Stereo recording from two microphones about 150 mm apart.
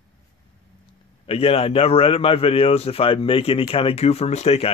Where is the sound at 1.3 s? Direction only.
40° left (ahead or behind).